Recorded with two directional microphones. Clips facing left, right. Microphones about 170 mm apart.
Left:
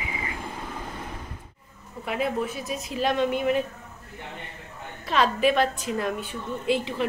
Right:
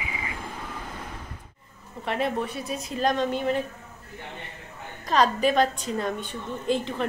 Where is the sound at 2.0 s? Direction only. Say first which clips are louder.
Even; 5° left (ahead or behind).